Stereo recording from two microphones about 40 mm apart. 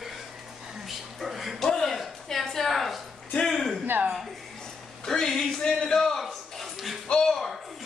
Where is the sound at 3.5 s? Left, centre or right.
Centre.